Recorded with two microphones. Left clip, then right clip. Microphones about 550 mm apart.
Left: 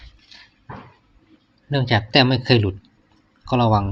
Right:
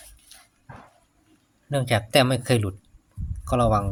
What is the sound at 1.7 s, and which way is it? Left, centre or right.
Speech, right.